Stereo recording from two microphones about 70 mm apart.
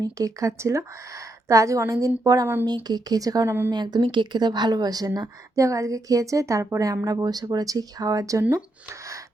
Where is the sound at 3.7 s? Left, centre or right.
Right.